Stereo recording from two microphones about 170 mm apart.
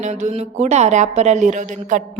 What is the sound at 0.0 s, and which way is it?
Speech, 45° right (ahead or behind).